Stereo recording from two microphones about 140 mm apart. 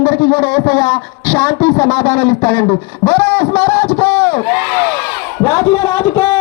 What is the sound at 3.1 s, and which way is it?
Speech, 15° left (ahead or behind).